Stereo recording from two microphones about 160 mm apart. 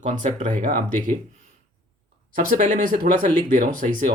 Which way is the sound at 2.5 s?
55° right (ahead or behind).